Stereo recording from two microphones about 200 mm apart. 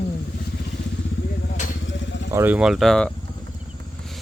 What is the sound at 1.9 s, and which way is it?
Vehicle, 70° left (ahead or behind).